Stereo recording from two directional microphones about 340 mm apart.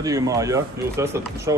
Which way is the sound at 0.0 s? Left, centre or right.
Centre.